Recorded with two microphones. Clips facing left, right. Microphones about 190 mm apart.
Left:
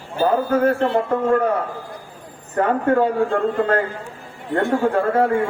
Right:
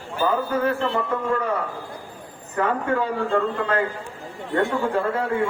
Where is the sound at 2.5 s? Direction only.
45° left (ahead or behind).